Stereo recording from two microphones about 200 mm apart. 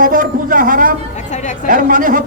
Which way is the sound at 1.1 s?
35° left (ahead or behind).